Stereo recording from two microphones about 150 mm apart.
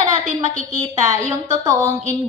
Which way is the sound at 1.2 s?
50° right (ahead or behind).